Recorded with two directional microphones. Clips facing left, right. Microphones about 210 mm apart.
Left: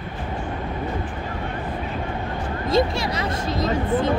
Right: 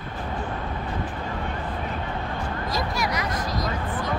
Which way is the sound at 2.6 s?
25° left (ahead or behind).